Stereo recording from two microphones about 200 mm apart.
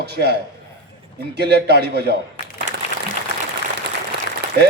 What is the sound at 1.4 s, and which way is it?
Speech, 55° right (ahead or behind).